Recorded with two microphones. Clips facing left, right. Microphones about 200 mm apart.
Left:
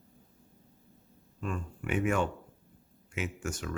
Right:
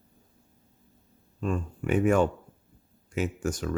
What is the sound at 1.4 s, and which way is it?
Speech, 35° right (ahead or behind).